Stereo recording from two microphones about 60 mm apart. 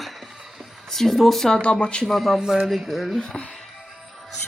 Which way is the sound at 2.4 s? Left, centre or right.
Centre.